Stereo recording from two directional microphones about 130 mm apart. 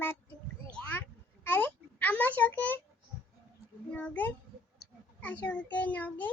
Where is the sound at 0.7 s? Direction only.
15° left (ahead or behind).